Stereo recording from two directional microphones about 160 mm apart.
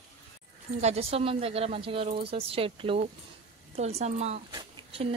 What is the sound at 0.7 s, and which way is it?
Speech, 40° right (ahead or behind).